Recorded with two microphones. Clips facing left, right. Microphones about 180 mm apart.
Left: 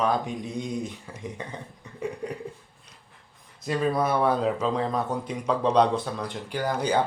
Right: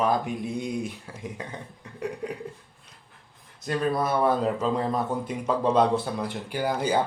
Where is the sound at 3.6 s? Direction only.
Centre (ahead or behind).